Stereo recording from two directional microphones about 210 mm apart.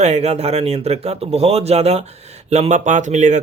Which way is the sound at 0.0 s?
30° right (ahead or behind).